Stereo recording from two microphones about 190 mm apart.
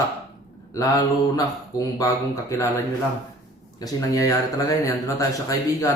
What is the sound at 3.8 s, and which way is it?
Speech, 15° left (ahead or behind).